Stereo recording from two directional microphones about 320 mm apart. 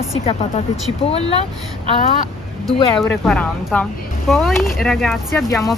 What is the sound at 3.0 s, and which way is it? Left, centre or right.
Speech, centre.